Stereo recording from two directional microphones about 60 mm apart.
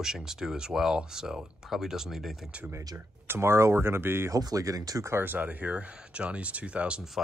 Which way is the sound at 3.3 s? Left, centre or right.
Right.